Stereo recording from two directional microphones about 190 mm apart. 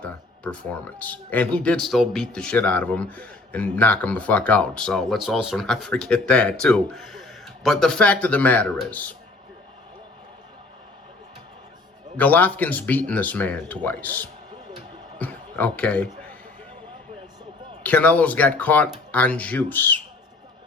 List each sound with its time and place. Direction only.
0.0 s speech: 5° left (ahead or behind)
12.1 s speech: 10° left (ahead or behind)
17.8 s speech: 10° left (ahead or behind)